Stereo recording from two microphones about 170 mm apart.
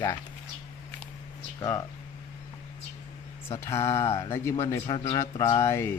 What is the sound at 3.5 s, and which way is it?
A man's voice, 15° left (ahead or behind).